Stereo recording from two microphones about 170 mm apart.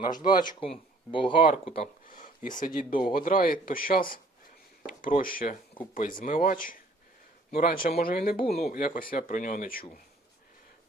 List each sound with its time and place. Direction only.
0.1 s speech: 25° left (ahead or behind)
2.0 s speech: 55° left (ahead or behind)